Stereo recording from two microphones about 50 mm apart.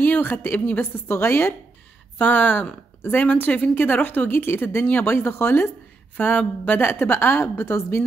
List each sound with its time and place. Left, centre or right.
0.0 s a woman's voice: left
2.1 s a woman's voice: left
5.1 s speech: left
6.1 s a woman's voice: left